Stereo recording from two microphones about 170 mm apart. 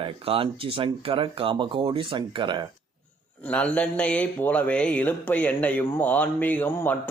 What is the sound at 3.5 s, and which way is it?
Speech, 5° left (ahead or behind).